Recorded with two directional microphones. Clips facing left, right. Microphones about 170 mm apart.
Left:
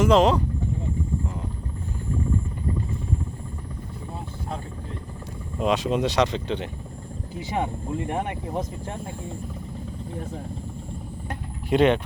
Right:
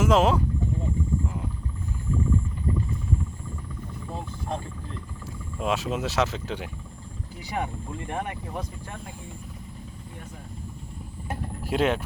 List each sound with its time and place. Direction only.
0.0 s speech: 5° right (ahead or behind)
5.5 s speech: centre (ahead or behind)
7.5 s speech: 20° left (ahead or behind)
11.3 s vehicle: 5° right (ahead or behind)